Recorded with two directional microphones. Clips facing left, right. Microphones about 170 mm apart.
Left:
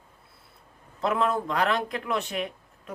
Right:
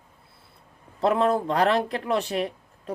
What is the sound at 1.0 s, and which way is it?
Speech, 30° right (ahead or behind).